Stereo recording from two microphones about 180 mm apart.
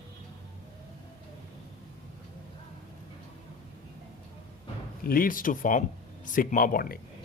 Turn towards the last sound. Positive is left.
turn(degrees=50)  # may be behind; listen again after turning